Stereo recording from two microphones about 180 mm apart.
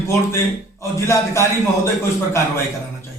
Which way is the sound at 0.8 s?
15° left (ahead or behind).